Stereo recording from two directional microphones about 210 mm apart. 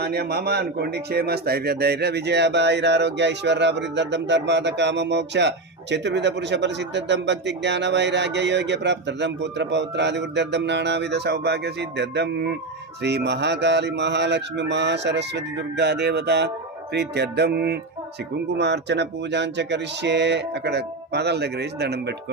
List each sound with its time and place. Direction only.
0.0 s speech: 50° right (ahead or behind)